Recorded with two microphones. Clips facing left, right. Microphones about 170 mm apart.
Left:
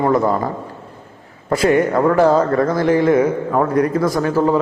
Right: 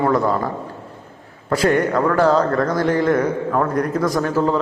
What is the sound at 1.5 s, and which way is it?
Speech, 5° left (ahead or behind).